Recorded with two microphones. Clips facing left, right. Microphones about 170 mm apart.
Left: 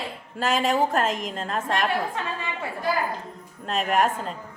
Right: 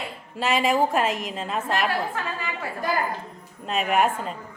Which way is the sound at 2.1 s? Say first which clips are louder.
Even; 25° left (ahead or behind).